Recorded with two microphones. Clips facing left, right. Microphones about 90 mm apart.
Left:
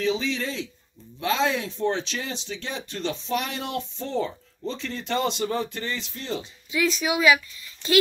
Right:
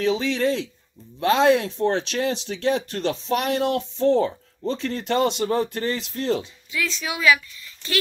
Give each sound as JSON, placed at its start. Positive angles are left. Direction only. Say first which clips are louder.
{"t": 0.0, "sound": "speech", "louder": "right 4 dB", "side_deg": -60}
{"t": 4.6, "sound": "speech", "louder": "right 5 dB", "side_deg": -45}
{"t": 6.7, "sound": "speech", "louder": "left 4 dB", "side_deg": 15}